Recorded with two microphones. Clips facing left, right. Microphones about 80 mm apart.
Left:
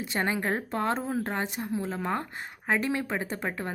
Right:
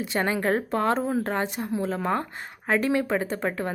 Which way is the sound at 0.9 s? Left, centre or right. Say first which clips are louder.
Right 5 dB; centre.